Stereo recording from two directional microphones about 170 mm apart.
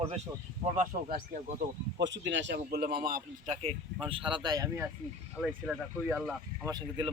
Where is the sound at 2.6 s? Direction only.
70° right (ahead or behind).